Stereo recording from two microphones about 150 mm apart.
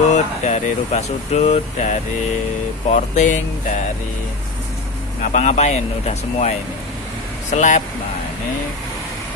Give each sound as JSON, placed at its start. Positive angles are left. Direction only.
{"t": 0.1, "sound": "speech", "side_deg": 50}
{"t": 5.2, "sound": "speech", "side_deg": 50}
{"t": 7.5, "sound": "speech", "side_deg": 55}